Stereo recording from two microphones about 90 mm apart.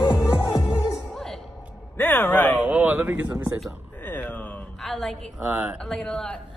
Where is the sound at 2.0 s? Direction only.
25° left (ahead or behind).